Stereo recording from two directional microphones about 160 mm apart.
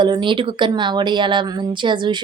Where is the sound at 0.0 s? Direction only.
30° right (ahead or behind).